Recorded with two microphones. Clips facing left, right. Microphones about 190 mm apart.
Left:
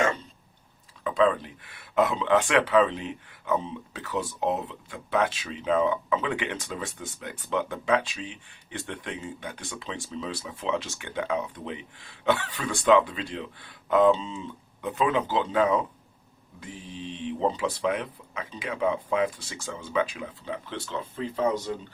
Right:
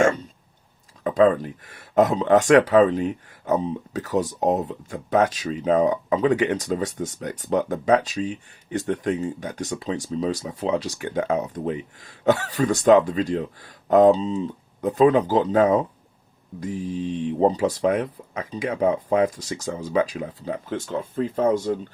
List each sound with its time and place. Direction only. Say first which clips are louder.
1.0 s speech: right 6 dB; 45° right (ahead or behind)